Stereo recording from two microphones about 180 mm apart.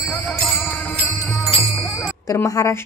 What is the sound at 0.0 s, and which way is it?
Jingle bell, centre (ahead or behind).